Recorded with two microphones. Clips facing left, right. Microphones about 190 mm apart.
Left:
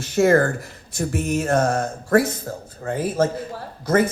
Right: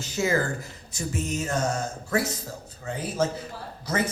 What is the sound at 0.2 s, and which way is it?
Speech, 55° left (ahead or behind).